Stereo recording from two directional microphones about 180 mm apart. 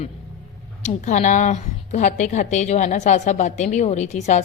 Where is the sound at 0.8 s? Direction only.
40° left (ahead or behind).